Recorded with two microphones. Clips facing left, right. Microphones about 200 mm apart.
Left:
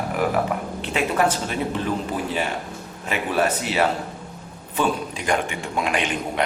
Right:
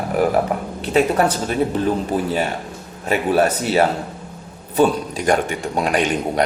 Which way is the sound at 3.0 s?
40° right (ahead or behind).